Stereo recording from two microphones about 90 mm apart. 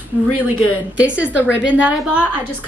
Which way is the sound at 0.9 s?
15° right (ahead or behind).